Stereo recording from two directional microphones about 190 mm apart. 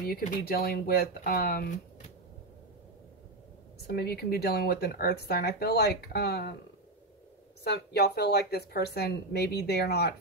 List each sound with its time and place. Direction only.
0.4 s speech: 55° left (ahead or behind)
3.8 s speech: 55° left (ahead or behind)
7.6 s speech: 60° left (ahead or behind)